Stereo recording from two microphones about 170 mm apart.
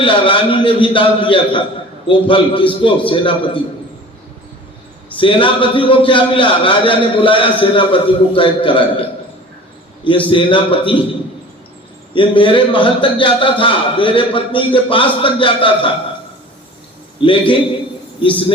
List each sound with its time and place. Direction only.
0.0 s a man's voice: 30° left (ahead or behind)
5.1 s a man's voice: 30° left (ahead or behind)
10.2 s a man's voice: 30° left (ahead or behind)
12.1 s a man's voice: 30° left (ahead or behind)
17.2 s a man's voice: 30° left (ahead or behind)